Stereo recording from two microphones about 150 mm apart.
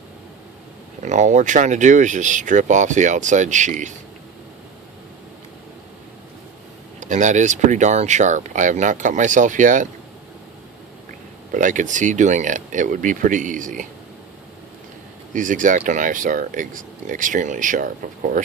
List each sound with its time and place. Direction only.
1.0 s speech: 50° right (ahead or behind)
7.0 s speech: 55° right (ahead or behind)
11.5 s speech: 60° right (ahead or behind)
15.3 s speech: 60° right (ahead or behind)